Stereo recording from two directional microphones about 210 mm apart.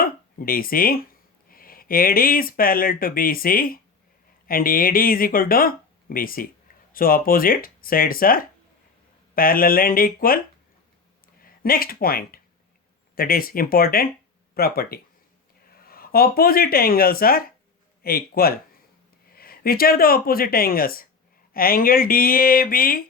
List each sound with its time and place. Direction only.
0.0 s speech: 45° left (ahead or behind)
11.4 s speech: 45° left (ahead or behind)